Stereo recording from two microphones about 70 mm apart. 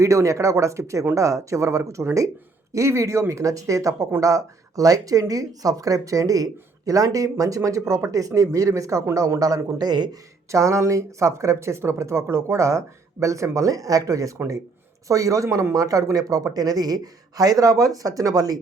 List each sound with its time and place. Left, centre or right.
0.0 s speech: right
10.5 s speech: right